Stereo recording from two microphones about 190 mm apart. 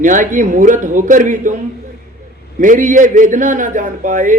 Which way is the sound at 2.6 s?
40° right (ahead or behind).